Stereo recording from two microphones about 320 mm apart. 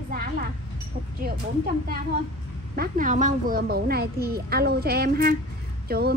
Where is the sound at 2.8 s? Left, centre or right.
Right.